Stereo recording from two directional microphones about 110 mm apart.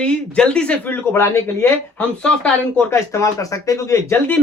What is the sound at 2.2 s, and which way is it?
Speech, 10° left (ahead or behind).